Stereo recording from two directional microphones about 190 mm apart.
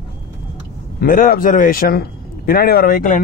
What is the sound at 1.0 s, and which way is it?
A man's voice, 50° left (ahead or behind).